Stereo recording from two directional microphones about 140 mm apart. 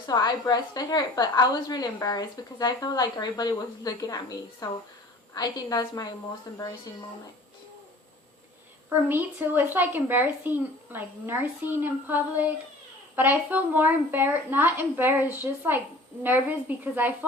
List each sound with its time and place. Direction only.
0.1 s a woman's voice: 25° left (ahead or behind)
9.0 s speech: 15° right (ahead or behind)